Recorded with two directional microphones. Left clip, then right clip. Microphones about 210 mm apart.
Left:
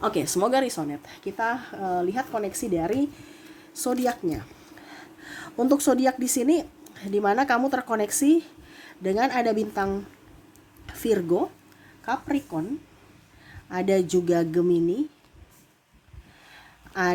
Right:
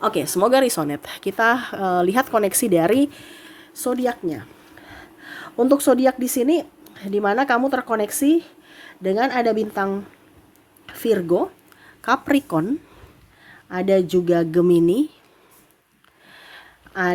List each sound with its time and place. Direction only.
0.0 s speech: 15° right (ahead or behind); by 3.4 s 30° right (ahead or behind)
3.8 s speech: 10° right (ahead or behind)
12.0 s speech: 35° right (ahead or behind)
13.7 s speech: 15° right (ahead or behind); by 15.0 s 35° right (ahead or behind)
16.9 s speech: 10° right (ahead or behind)